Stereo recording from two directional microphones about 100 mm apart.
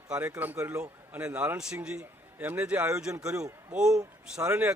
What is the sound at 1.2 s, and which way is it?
A man's voice, 15° right (ahead or behind).